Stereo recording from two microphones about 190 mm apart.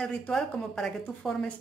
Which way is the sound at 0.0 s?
5° left (ahead or behind).